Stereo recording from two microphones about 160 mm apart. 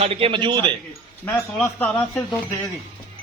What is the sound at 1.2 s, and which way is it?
Speech, 15° left (ahead or behind).